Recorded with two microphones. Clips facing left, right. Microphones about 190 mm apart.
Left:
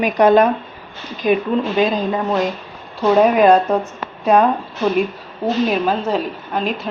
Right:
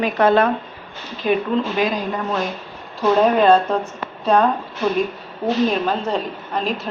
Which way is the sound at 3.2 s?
15° left (ahead or behind).